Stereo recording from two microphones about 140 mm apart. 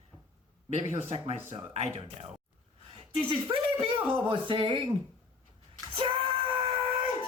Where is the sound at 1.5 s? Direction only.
45° right (ahead or behind).